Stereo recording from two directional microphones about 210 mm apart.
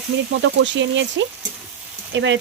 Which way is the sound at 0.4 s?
60° right (ahead or behind).